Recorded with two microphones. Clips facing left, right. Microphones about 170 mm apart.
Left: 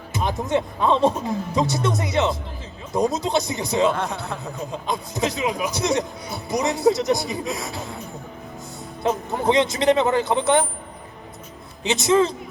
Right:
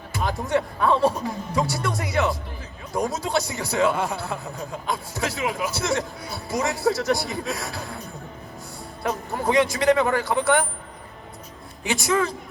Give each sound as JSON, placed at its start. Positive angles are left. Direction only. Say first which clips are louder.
{"t": 0.1, "sound": "speech", "louder": "left 1 dB", "side_deg": 20}
{"t": 3.9, "sound": "speech", "louder": "right 1 dB", "side_deg": 0}
{"t": 4.7, "sound": "speech", "louder": "left 2 dB", "side_deg": 20}
{"t": 9.0, "sound": "speech", "louder": "left 4 dB", "side_deg": 20}
{"t": 11.8, "sound": "speech", "louder": "left 5 dB", "side_deg": 20}